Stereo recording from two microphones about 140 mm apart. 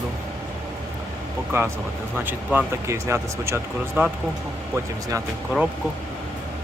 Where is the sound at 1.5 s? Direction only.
20° right (ahead or behind).